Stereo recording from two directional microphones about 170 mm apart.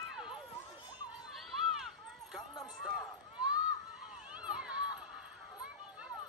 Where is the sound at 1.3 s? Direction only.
Centre (ahead or behind).